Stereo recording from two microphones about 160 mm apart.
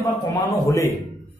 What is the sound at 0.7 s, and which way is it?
Speech, 20° left (ahead or behind).